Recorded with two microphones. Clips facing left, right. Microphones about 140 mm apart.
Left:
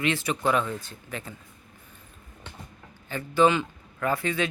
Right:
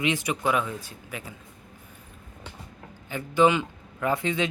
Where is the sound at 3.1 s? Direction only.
15° right (ahead or behind).